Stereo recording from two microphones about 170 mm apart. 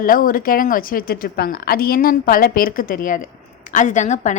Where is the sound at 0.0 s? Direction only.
55° left (ahead or behind).